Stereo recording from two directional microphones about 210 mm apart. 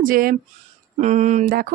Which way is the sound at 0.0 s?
40° right (ahead or behind).